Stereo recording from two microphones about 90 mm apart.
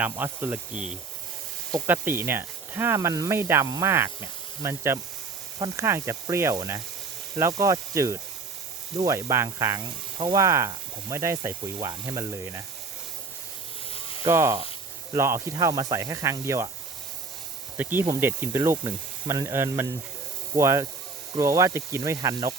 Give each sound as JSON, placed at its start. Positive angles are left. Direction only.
{"t": 0.0, "sound": "speech", "side_deg": -20}
{"t": 1.9, "sound": "speech", "side_deg": -25}
{"t": 11.8, "sound": "speech", "side_deg": -45}
{"t": 13.9, "sound": "a sound", "side_deg": 90}
{"t": 14.3, "sound": "speech", "side_deg": -35}
{"t": 17.7, "sound": "speech", "side_deg": -20}